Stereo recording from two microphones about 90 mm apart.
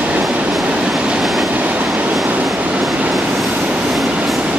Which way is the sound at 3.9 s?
Centre (ahead or behind).